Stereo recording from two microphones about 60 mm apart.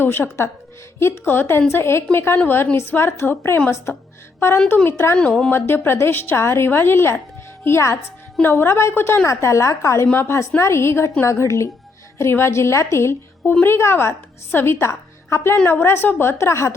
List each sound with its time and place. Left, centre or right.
0.0 s a woman's voice: left
9.2 s a woman's voice: left
13.5 s a woman's voice: left
13.7 s a woman's voice: left